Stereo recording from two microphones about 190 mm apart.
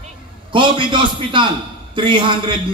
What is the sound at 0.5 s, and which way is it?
A man's voice, 25° right (ahead or behind).